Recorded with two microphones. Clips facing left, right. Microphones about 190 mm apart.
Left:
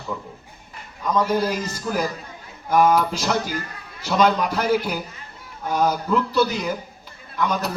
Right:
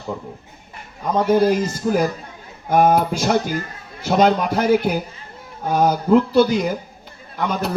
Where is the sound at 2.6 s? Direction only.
55° right (ahead or behind).